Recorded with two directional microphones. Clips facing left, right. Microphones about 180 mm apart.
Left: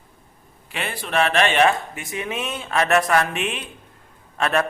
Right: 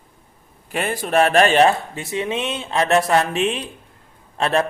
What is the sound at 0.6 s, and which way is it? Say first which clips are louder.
Speech: right 6 dB; 45° right (ahead or behind).